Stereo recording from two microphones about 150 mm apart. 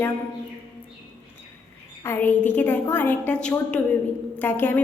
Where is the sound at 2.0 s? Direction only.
15° left (ahead or behind).